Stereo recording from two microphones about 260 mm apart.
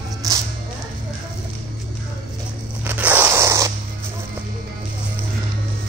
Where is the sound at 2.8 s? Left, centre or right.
Centre.